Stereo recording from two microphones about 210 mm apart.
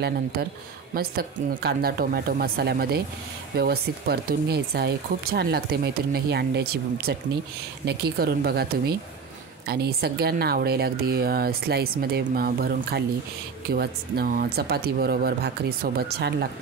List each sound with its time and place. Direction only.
0.9 s speech: 45° right (ahead or behind)